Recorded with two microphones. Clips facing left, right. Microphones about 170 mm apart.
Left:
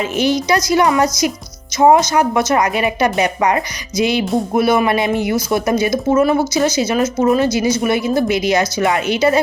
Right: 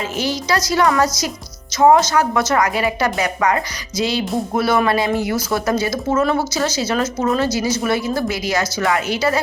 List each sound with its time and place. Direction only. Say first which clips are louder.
0.0 s speech: left 6 dB; 20° left (ahead or behind)